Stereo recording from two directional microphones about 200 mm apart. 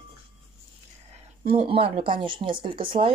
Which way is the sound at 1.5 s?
25° right (ahead or behind).